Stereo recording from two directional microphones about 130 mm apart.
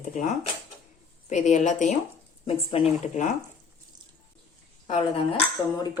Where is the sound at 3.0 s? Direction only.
70° left (ahead or behind).